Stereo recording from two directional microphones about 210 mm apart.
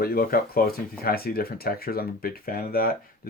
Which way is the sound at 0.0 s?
45° left (ahead or behind).